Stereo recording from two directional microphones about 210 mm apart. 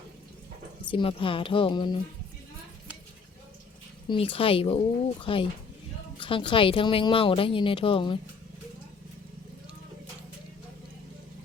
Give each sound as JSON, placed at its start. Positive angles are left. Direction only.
{"t": 0.9, "sound": "speech", "side_deg": 25}
{"t": 4.1, "sound": "speech", "side_deg": 25}